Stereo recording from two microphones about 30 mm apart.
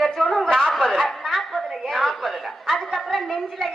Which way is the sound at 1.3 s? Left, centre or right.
Centre.